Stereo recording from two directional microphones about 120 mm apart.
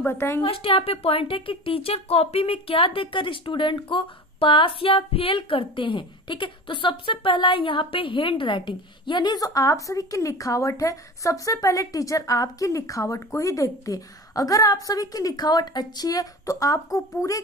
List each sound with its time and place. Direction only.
0.0 s a woman's voice: 20° left (ahead or behind)
0.4 s a woman's voice: 50° left (ahead or behind); by 17.4 s 30° left (ahead or behind)